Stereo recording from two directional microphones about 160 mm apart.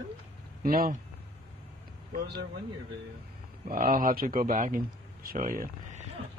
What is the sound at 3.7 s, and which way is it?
Speech, 60° right (ahead or behind).